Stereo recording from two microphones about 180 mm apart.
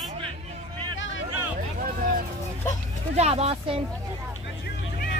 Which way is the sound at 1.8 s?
55° right (ahead or behind).